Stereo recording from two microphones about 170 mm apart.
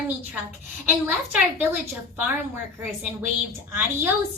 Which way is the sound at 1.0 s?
10° right (ahead or behind).